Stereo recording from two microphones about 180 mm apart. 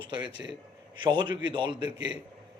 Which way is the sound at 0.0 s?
25° right (ahead or behind).